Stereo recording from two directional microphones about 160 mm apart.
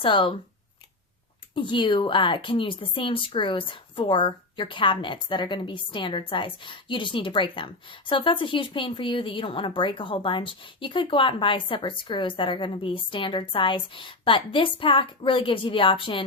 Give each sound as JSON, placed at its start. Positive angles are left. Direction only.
{"t": 0.0, "sound": "a woman's voice", "side_deg": 30}
{"t": 1.5, "sound": "a woman's voice", "side_deg": 30}